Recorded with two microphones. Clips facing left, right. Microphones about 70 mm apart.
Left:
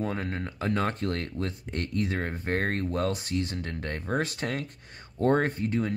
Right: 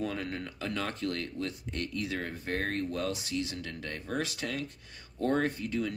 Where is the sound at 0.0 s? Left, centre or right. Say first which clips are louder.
Left 3 dB; left.